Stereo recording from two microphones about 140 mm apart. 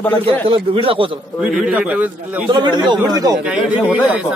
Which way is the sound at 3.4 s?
10° right (ahead or behind).